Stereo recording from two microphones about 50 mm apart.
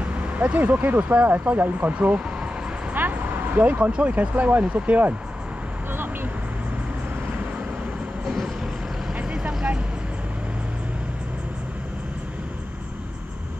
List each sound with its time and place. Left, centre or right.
0.4 s speech: right
2.9 s vehicle: right
3.9 s speech: right